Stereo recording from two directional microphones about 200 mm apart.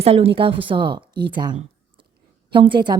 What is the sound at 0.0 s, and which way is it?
Speech, 30° right (ahead or behind).